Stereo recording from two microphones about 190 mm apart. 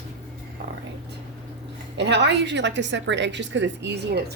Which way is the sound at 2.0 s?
65° right (ahead or behind).